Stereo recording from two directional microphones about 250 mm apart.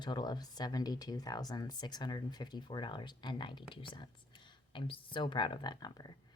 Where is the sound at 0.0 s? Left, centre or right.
Centre.